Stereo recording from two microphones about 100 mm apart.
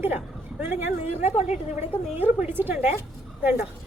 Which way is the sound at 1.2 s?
90° left.